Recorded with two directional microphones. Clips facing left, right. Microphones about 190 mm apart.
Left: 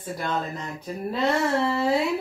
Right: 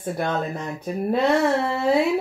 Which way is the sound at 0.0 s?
55° right (ahead or behind).